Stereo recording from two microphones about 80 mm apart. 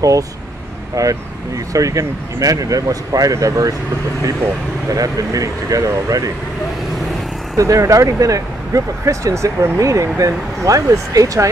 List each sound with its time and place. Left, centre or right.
1.0 s speech: right
4.9 s speech: right
7.5 s speech: right